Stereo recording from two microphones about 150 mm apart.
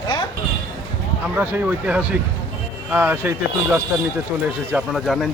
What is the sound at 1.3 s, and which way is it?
Speech, 10° right (ahead or behind).